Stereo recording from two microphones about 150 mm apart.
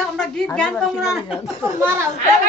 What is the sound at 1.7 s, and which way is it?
Speech, 15° right (ahead or behind).